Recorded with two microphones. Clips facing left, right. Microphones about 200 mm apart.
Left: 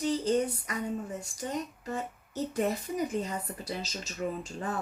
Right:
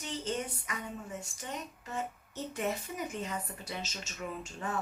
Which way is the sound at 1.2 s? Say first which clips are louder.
Left 7 dB; 35° left (ahead or behind).